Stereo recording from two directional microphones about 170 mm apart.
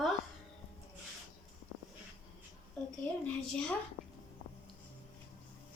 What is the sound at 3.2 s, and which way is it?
Speech, 5° left (ahead or behind).